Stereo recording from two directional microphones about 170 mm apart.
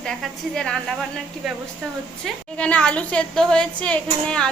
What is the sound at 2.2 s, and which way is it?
A woman's voice, 5° left (ahead or behind).